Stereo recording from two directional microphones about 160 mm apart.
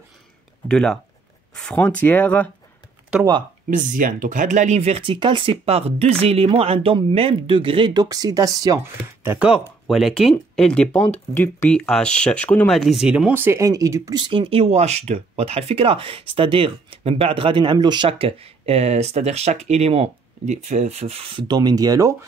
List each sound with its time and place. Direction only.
0.7 s speech: 5° left (ahead or behind)
3.7 s speech: 55° right (ahead or behind); by 22.1 s 20° right (ahead or behind)